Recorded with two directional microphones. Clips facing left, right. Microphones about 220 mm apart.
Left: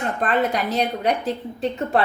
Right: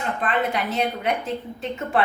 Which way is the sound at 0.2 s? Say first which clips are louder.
Left 3 dB; 40° left (ahead or behind).